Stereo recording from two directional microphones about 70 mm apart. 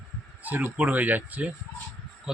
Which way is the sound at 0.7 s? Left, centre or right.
Right.